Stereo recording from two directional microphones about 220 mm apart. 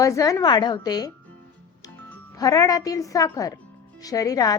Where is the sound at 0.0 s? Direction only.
15° left (ahead or behind).